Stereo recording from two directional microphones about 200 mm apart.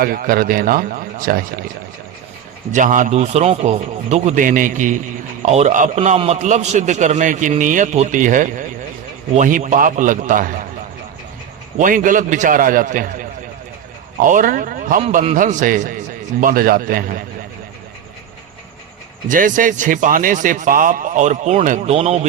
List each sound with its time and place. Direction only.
0.0 s a man's voice: 45° right (ahead or behind)
2.7 s a man's voice: 40° right (ahead or behind)
11.8 s a man's voice: 40° right (ahead or behind)
15.0 s a man's voice: 30° right (ahead or behind)
19.3 s a man's voice: 40° right (ahead or behind)